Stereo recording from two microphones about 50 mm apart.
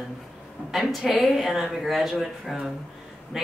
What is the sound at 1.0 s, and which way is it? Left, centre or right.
Speech, centre.